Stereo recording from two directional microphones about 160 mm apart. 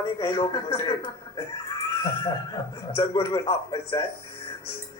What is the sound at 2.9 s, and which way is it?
Speech, 25° left (ahead or behind).